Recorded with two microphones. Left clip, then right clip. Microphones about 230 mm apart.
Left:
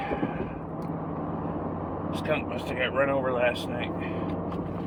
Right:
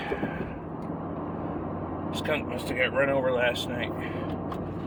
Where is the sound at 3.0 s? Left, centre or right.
Right.